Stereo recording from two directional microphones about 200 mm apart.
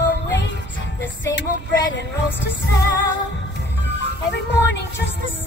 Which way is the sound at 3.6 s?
60° left (ahead or behind).